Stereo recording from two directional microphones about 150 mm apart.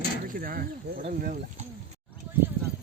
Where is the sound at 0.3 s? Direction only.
75° right (ahead or behind).